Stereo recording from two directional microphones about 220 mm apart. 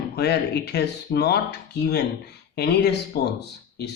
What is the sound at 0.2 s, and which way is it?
Speech, 45° left (ahead or behind).